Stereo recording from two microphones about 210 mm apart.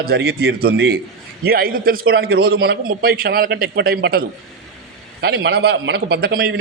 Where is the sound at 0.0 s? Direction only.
50° right (ahead or behind).